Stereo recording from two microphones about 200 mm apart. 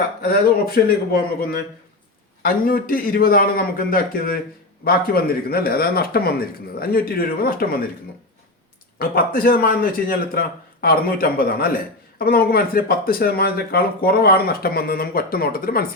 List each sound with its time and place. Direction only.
0.3 s speech: 50° left (ahead or behind)
9.0 s speech: 50° left (ahead or behind)